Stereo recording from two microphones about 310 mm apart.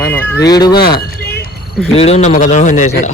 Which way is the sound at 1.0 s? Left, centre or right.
Left.